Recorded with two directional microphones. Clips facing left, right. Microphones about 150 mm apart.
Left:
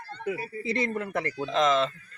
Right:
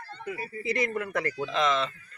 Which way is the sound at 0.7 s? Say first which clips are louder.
Even; 30° left (ahead or behind).